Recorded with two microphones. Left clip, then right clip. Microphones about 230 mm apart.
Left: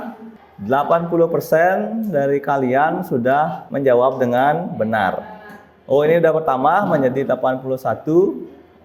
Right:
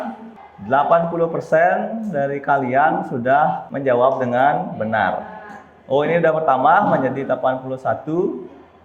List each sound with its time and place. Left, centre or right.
0.7 s speech: left